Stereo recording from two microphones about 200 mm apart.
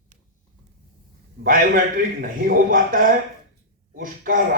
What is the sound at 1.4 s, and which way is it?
A man's voice, 45° right (ahead or behind).